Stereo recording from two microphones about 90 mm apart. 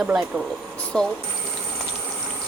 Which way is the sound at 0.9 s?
5° left (ahead or behind).